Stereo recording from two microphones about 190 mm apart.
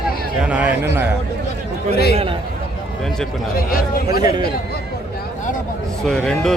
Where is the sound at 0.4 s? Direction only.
5° right (ahead or behind).